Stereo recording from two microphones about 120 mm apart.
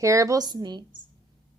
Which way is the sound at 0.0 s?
25° right (ahead or behind).